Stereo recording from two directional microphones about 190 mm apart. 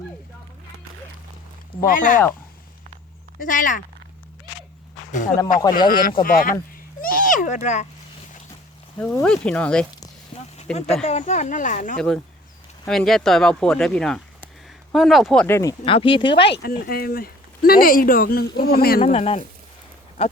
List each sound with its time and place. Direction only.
1.8 s speech: 45° left (ahead or behind)
3.3 s speech: 45° left (ahead or behind)
5.1 s speech: 40° left (ahead or behind)
7.0 s a sound: 45° left (ahead or behind)
9.2 s speech: 5° left (ahead or behind)
11.0 s speech: 40° left (ahead or behind)
11.9 s speech: centre (ahead or behind)
15.8 s speech: 30° left (ahead or behind)
16.5 s speech: 50° left (ahead or behind)
19.0 s speech: 35° left (ahead or behind)
20.2 s goat: 30° left (ahead or behind)